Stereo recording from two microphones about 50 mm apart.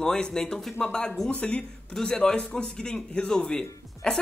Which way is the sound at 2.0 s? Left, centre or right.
Centre.